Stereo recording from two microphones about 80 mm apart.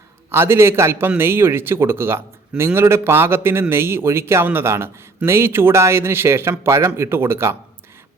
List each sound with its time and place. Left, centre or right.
0.3 s a man's voice: right